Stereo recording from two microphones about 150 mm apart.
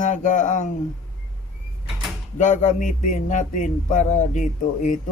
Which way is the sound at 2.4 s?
55° left (ahead or behind).